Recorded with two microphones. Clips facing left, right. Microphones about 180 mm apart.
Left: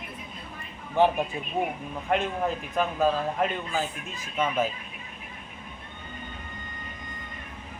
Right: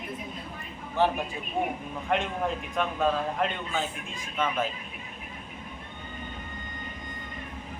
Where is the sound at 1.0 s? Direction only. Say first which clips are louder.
Left 3 dB; 15° left (ahead or behind).